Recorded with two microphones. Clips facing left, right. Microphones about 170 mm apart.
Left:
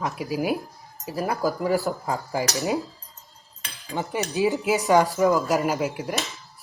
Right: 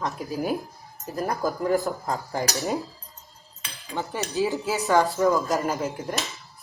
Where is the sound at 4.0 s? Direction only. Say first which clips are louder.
Left 2 dB; 20° left (ahead or behind).